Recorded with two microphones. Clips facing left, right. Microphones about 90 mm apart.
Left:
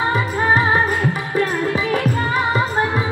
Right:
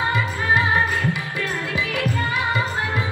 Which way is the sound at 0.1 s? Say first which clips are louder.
Left 4 dB; 35° left (ahead or behind).